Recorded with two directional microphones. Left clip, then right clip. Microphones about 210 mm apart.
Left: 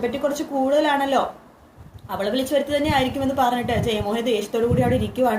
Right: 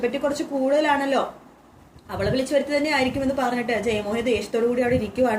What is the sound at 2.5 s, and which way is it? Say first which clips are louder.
A woman's voice: left 2 dB; 15° left (ahead or behind).